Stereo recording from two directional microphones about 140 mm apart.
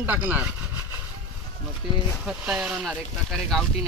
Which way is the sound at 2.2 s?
5° right (ahead or behind).